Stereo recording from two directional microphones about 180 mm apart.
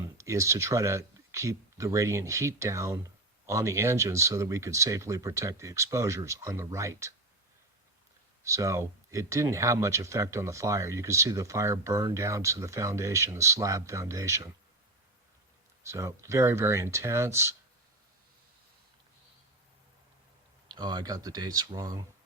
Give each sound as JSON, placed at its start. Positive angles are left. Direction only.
{"t": 0.2, "sound": "speech", "side_deg": -15}
{"t": 8.4, "sound": "speech", "side_deg": -15}
{"t": 15.8, "sound": "speech", "side_deg": -15}
{"t": 20.7, "sound": "speech", "side_deg": -25}